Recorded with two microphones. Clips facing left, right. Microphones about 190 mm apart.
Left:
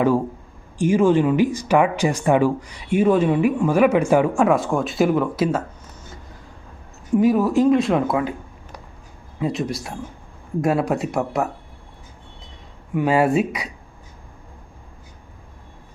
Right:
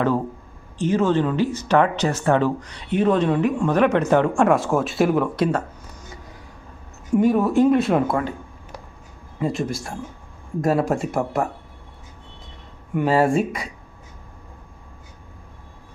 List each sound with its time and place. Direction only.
0.8 s speech: 10° left (ahead or behind)
7.2 s speech: centre (ahead or behind)
9.4 s speech: centre (ahead or behind)
12.9 s speech: centre (ahead or behind)